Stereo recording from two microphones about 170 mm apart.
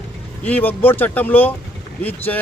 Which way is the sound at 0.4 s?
10° left (ahead or behind).